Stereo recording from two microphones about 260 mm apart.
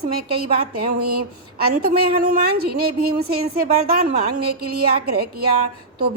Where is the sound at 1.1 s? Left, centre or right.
Right.